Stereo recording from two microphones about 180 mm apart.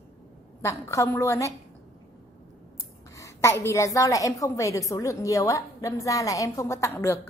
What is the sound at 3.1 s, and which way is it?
A woman's voice, 15° left (ahead or behind).